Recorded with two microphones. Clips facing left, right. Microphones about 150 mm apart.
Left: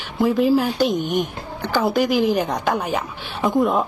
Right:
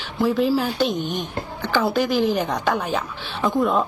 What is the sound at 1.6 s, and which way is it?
A woman's voice, centre (ahead or behind).